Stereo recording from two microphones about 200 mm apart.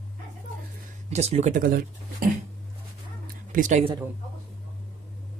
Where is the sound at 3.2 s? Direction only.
40° right (ahead or behind).